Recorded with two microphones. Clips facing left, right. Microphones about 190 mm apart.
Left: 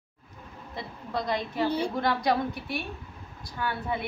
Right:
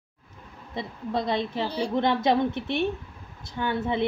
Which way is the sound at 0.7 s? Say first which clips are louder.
Right 5 dB; 25° right (ahead or behind).